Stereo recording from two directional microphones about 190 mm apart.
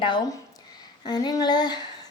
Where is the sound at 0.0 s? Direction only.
25° left (ahead or behind).